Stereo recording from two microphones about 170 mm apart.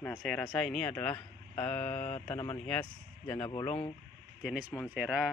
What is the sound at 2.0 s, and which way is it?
Mantra, 35° left (ahead or behind).